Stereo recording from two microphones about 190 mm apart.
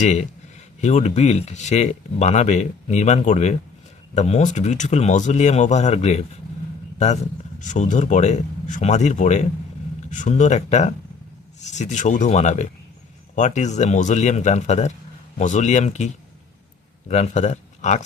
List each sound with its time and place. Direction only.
0.0 s speech: 35° left (ahead or behind)